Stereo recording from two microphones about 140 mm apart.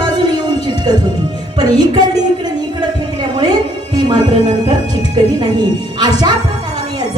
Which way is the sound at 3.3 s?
30° right (ahead or behind).